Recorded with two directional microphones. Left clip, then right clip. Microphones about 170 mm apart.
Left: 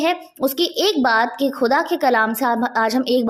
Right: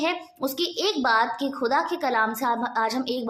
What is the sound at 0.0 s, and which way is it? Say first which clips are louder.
A woman's voice: left 7 dB; 40° left (ahead or behind).